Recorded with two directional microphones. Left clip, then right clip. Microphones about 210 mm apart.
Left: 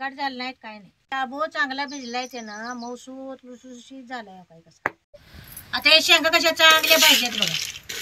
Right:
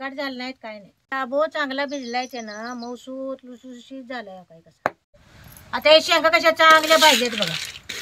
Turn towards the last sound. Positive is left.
turn(degrees=-20)  # may be behind; listen again after turning